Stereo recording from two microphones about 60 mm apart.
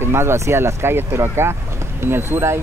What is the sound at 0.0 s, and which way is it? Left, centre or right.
Speech, right.